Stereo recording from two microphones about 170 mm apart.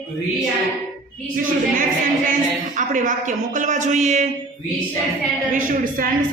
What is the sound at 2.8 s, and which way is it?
A woman's voice, 50° right (ahead or behind).